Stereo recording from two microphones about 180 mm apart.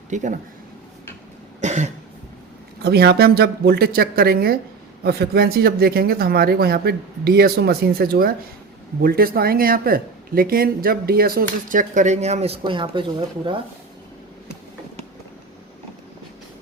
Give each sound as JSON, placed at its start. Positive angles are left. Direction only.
{"t": 0.1, "sound": "speech", "side_deg": -45}
{"t": 1.6, "sound": "cough", "side_deg": -40}
{"t": 2.8, "sound": "speech", "side_deg": -60}